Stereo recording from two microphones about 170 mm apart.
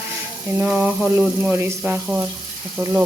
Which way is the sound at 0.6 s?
10° right (ahead or behind).